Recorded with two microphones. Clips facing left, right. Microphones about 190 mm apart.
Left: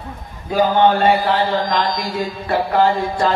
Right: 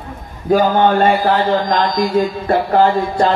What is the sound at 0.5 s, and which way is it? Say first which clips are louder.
A man's voice: right 2 dB; 45° right (ahead or behind).